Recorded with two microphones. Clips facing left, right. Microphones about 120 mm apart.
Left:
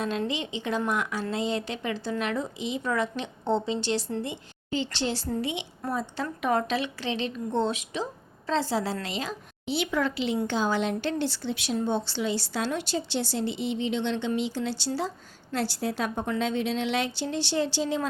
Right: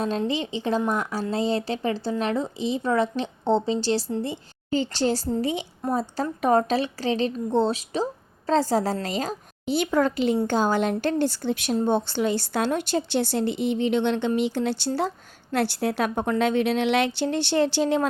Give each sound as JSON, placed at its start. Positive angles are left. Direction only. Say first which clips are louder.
{"t": 0.3, "sound": "a woman's voice", "louder": "right 5 dB", "side_deg": -35}